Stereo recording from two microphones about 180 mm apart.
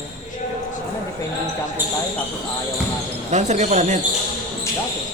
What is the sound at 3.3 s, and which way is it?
Speech, 40° right (ahead or behind).